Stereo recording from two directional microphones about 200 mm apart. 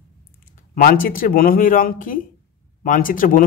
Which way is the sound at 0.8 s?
45° left (ahead or behind).